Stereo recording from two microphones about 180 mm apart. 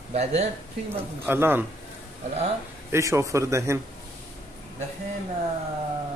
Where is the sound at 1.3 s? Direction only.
10° right (ahead or behind).